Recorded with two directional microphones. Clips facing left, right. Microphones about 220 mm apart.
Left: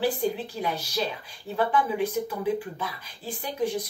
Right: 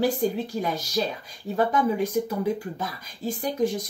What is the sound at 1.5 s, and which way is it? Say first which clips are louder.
Speech: right 2 dB; 40° right (ahead or behind).